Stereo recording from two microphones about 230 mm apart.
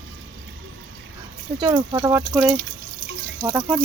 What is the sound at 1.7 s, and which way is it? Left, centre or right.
Speech, centre.